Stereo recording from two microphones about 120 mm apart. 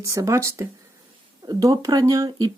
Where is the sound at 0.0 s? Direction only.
25° right (ahead or behind).